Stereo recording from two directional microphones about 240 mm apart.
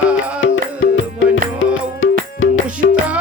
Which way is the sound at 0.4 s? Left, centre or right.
Left.